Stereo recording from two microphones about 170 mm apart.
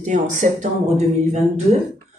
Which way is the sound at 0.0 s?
45° right (ahead or behind).